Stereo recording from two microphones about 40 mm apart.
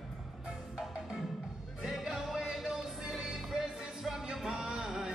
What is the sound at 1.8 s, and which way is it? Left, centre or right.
Music, centre.